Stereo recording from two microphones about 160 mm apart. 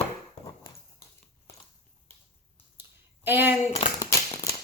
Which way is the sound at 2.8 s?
15° right (ahead or behind).